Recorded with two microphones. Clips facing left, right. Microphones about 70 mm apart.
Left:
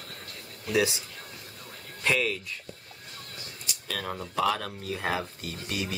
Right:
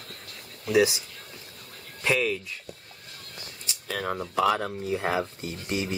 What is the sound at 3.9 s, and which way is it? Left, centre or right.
Speech, centre.